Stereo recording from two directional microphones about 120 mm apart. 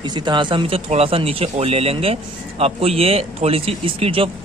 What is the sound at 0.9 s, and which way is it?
Speech, 55° right (ahead or behind).